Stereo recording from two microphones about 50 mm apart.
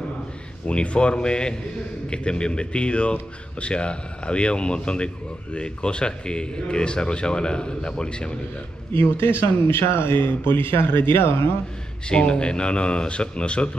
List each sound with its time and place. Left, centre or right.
0.7 s speech: centre
8.9 s speech: left
12.1 s speech: centre